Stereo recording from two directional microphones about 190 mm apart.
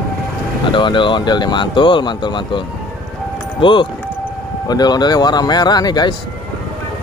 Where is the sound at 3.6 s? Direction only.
25° left (ahead or behind).